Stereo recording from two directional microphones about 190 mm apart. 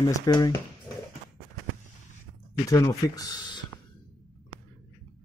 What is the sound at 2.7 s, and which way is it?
Speech, 15° left (ahead or behind).